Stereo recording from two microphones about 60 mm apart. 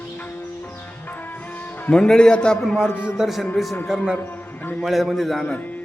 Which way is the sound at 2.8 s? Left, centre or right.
Left.